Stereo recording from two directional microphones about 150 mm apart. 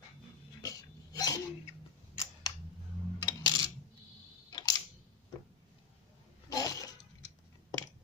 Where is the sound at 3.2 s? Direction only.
25° left (ahead or behind).